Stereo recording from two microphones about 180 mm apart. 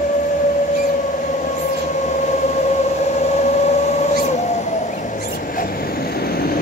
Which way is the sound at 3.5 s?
40° left (ahead or behind).